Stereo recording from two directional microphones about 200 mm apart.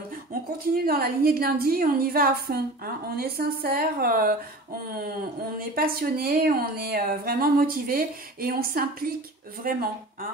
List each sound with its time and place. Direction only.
0.8 s a woman's voice: 50° right (ahead or behind)
5.6 s a woman's voice: 50° right (ahead or behind)